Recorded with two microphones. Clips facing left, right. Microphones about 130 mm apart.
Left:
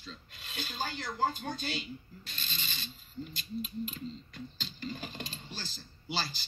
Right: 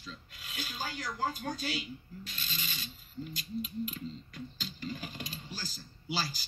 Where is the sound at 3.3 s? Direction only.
30° left (ahead or behind).